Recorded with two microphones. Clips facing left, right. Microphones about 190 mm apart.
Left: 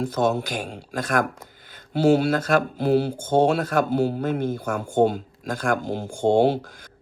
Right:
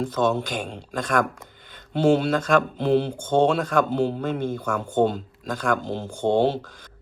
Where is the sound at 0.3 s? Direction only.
10° left (ahead or behind).